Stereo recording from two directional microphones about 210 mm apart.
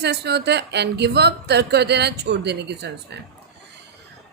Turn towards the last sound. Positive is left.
turn(degrees=-55)  # may be behind; listen again after turning